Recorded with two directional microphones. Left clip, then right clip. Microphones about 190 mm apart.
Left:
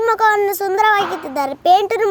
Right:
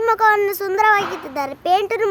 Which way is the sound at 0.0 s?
20° left (ahead or behind).